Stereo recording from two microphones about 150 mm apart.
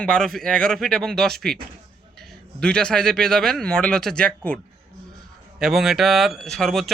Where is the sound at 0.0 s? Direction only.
5° left (ahead or behind).